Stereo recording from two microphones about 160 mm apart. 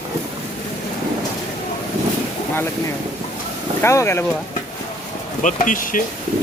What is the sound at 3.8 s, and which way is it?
Speech, 15° left (ahead or behind).